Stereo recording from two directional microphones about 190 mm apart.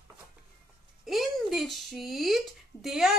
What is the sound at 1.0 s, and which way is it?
Speech, centre (ahead or behind).